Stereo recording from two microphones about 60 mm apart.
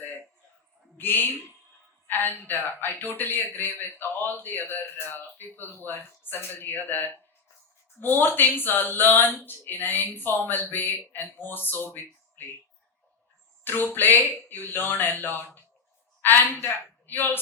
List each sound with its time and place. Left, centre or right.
0.9 s speech: left
13.7 s speech: left
16.2 s a man's voice: left